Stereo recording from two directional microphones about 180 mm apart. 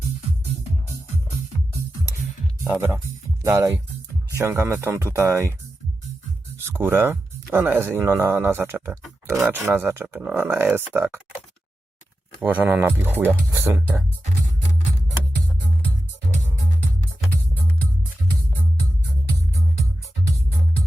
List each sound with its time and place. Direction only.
2.7 s speech: 10° right (ahead or behind)
6.6 s speech: 10° right (ahead or behind)
12.4 s speech: 10° right (ahead or behind)